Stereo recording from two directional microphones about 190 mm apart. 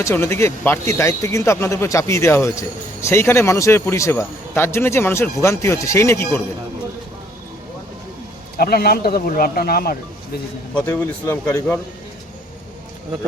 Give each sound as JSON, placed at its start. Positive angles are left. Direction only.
{"t": 0.0, "sound": "speech", "side_deg": 15}
{"t": 8.5, "sound": "speech", "side_deg": 55}
{"t": 10.8, "sound": "speech", "side_deg": 10}